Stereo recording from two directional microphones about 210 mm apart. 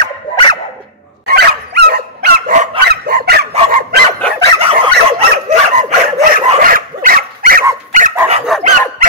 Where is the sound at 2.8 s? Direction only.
50° right (ahead or behind).